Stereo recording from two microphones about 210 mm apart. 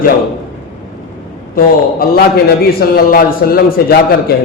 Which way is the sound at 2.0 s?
45° left (ahead or behind).